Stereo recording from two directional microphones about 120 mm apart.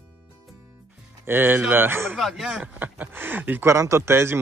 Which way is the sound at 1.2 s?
15° right (ahead or behind).